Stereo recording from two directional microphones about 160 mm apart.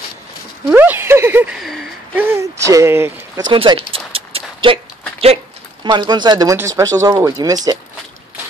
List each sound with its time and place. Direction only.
0.7 s speech: 10° right (ahead or behind)
2.1 s speech: 15° right (ahead or behind)
3.4 s a sound: 30° right (ahead or behind)
5.9 s speech: 30° right (ahead or behind)